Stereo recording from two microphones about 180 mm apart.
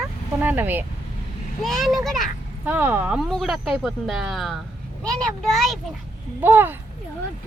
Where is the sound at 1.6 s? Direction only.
Centre (ahead or behind).